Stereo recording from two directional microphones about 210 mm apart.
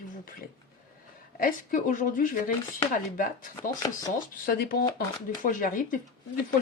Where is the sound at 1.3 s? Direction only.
40° left (ahead or behind).